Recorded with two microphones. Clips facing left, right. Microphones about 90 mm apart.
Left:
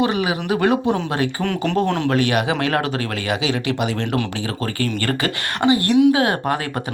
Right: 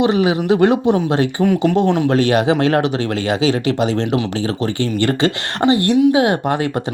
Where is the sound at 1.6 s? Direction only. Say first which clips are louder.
Right 1 dB; 10° right (ahead or behind).